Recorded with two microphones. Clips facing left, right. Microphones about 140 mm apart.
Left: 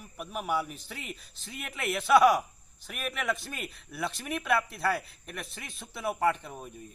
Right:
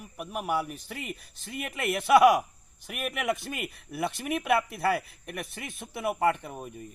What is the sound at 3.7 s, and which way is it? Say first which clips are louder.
Speech: right 3 dB; 55° right (ahead or behind).